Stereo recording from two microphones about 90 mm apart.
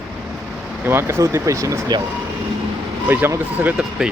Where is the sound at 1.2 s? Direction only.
35° right (ahead or behind).